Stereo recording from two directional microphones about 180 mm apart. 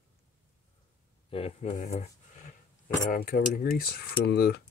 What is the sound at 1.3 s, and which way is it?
Speech, 35° left (ahead or behind).